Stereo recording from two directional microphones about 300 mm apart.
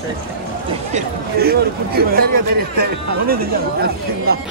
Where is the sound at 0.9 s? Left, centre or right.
Right.